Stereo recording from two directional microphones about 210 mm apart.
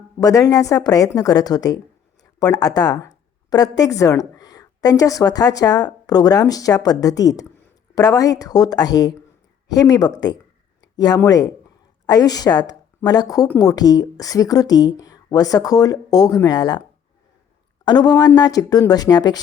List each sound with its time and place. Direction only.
0.2 s a woman's voice: 15° left (ahead or behind)
17.8 s speech: 20° left (ahead or behind)